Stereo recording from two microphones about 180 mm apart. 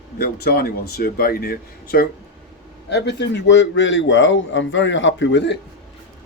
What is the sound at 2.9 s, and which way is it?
A man's voice, 70° left (ahead or behind).